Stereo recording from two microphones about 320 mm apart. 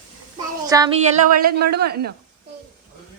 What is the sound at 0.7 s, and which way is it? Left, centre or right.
Speech, centre.